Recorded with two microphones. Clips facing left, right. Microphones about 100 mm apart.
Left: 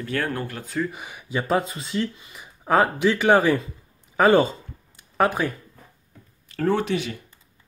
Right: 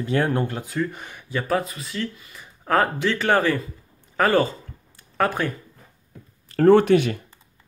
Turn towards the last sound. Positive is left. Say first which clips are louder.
# right 9 dB
turn(degrees=-55)  # may be behind; listen again after turning